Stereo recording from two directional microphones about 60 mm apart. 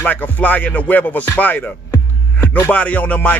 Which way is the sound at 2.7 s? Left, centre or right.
Left.